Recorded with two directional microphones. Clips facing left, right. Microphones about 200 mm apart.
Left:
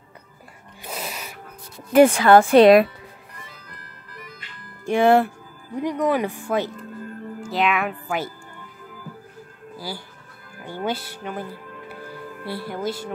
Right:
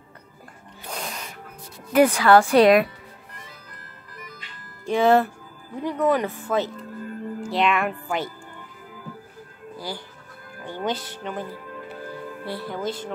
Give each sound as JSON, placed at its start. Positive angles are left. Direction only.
{"t": 0.8, "sound": "music", "side_deg": 5}
{"t": 1.9, "sound": "speech", "side_deg": 25}
{"t": 4.8, "sound": "speech", "side_deg": 10}
{"t": 7.3, "sound": "speech", "side_deg": 0}
{"t": 9.8, "sound": "speech", "side_deg": 5}
{"t": 12.4, "sound": "speech", "side_deg": 10}